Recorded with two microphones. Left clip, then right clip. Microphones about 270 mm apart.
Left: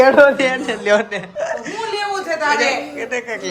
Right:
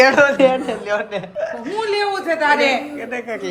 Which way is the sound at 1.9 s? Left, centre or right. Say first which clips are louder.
Right 2 dB; right.